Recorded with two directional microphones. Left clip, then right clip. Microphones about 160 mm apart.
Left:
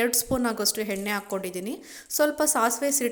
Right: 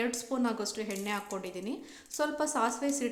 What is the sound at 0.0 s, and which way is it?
A woman's voice, 30° left (ahead or behind).